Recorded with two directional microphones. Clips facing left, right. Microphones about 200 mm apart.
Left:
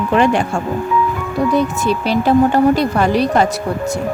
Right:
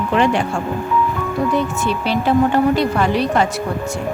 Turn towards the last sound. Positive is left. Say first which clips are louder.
# left 3 dB
turn(degrees=40)  # may be behind; listen again after turning